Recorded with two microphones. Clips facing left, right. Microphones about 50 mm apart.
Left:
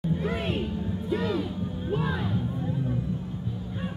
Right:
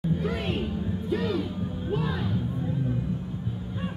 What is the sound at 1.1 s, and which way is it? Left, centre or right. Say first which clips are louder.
Music: even; centre.